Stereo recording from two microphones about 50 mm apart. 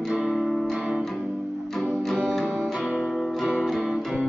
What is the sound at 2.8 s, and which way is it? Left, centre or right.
Music, centre.